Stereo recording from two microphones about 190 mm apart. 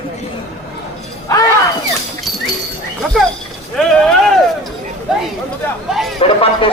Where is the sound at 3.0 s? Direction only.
Centre (ahead or behind).